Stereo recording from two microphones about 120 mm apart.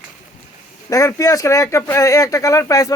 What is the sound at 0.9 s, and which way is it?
A man's voice, 25° left (ahead or behind).